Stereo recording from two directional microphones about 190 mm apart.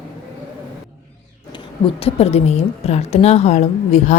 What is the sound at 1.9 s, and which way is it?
A woman's voice, 30° left (ahead or behind).